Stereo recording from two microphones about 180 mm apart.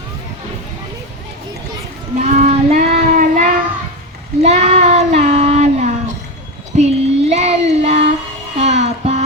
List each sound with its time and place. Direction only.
2.1 s child singing: 40° right (ahead or behind)
8.5 s music: 40° right (ahead or behind)